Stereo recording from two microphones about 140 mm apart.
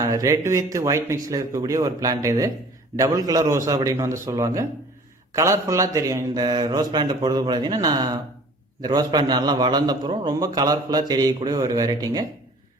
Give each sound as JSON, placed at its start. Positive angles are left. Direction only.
{"t": 0.0, "sound": "a man's voice", "side_deg": -25}